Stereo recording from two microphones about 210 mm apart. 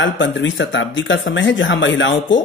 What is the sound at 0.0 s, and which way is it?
Speech, 60° left (ahead or behind).